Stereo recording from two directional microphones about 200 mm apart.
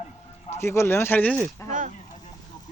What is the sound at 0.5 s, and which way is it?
Speech, 15° left (ahead or behind).